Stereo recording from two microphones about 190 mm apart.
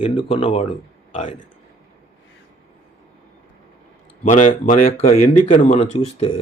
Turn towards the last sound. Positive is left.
turn(degrees=30)  # may be behind; listen again after turning